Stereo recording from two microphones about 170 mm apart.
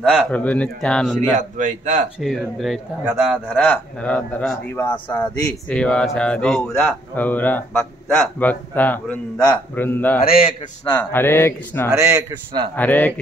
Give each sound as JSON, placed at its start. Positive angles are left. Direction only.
{"t": 0.0, "sound": "a man's voice", "side_deg": 5}
{"t": 1.4, "sound": "a man's voice", "side_deg": -45}
{"t": 2.1, "sound": "a man's voice", "side_deg": 0}
{"t": 3.4, "sound": "speech", "side_deg": 10}
{"t": 10.2, "sound": "a man's voice", "side_deg": 60}
{"t": 10.9, "sound": "speech", "side_deg": 15}
{"t": 11.9, "sound": "a man's voice", "side_deg": -5}
{"t": 12.2, "sound": "a man's voice", "side_deg": -25}
{"t": 12.7, "sound": "speech", "side_deg": 10}